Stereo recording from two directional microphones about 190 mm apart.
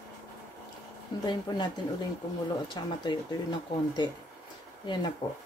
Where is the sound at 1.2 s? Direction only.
25° left (ahead or behind).